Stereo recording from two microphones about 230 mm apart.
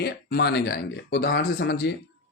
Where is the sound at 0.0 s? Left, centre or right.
Left.